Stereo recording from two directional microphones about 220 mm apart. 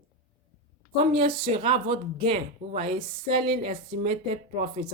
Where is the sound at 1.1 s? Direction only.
25° right (ahead or behind).